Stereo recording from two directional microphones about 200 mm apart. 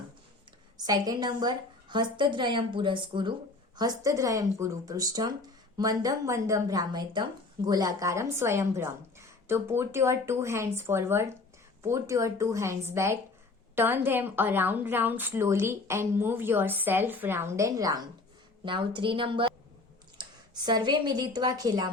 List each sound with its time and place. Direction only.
0.9 s a woman's voice: 20° right (ahead or behind)